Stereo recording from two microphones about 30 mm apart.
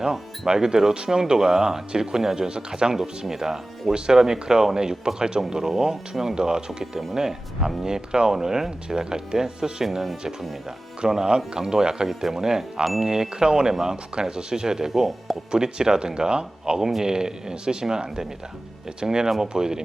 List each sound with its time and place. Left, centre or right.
0.0 s speech: right
2.5 s speech: right
3.2 s speech: centre
3.9 s speech: right
9.8 s speech: centre
11.0 s speech: centre
12.8 s speech: centre
13.1 s speech: right